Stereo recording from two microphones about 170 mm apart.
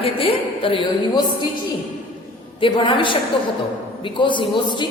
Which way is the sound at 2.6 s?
30° left (ahead or behind).